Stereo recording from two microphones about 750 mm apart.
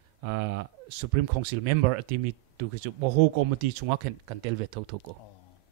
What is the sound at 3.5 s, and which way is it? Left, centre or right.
Speech, right.